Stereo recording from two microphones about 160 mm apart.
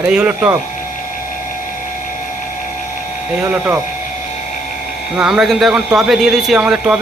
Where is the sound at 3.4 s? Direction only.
10° right (ahead or behind).